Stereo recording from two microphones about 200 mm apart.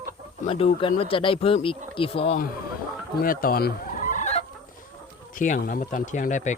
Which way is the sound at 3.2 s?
45° left (ahead or behind).